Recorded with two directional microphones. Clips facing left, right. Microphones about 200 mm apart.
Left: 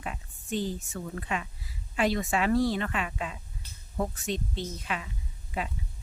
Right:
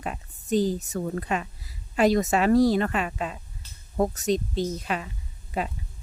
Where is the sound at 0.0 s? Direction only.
40° right (ahead or behind).